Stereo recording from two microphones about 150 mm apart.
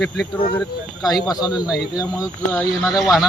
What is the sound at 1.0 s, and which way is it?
Speech, centre (ahead or behind).